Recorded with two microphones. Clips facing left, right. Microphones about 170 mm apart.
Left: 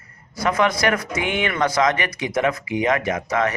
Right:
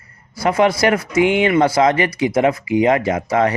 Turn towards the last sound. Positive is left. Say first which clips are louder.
# right 5 dB
turn(degrees=-30)  # may be behind; listen again after turning